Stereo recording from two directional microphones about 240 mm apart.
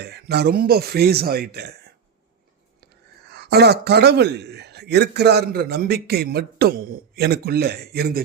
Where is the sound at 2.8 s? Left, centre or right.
Right.